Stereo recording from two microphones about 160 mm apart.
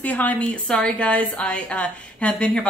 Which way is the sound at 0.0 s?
10° left (ahead or behind).